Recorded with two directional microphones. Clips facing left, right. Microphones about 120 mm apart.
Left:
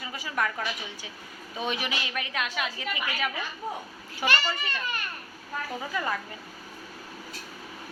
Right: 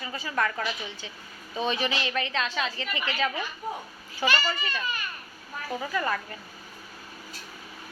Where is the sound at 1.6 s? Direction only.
10° left (ahead or behind).